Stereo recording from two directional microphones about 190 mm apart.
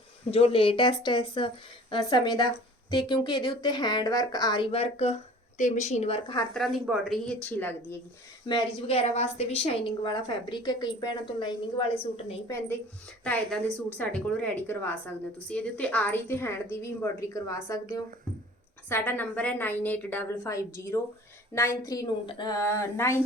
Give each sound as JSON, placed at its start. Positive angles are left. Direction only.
{"t": 0.3, "sound": "speech", "side_deg": 30}
{"t": 6.5, "sound": "speech", "side_deg": 0}
{"t": 7.4, "sound": "a woman's voice", "side_deg": 10}
{"t": 8.4, "sound": "speech", "side_deg": 25}
{"t": 12.5, "sound": "a woman's voice", "side_deg": 15}